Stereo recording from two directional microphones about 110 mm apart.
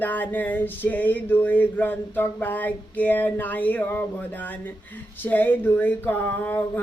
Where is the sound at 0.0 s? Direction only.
15° left (ahead or behind).